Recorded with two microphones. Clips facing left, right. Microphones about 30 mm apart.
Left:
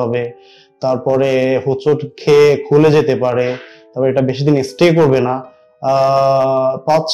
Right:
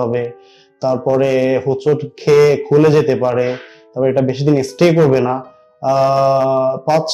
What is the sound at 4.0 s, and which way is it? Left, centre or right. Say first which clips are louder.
Speech: even; centre.